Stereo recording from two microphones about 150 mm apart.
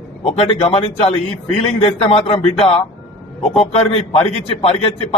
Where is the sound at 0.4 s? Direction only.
40° left (ahead or behind).